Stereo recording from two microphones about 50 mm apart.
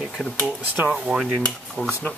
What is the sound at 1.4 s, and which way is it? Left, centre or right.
Speech, left.